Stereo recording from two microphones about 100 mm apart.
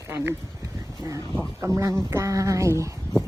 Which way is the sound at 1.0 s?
30° right (ahead or behind).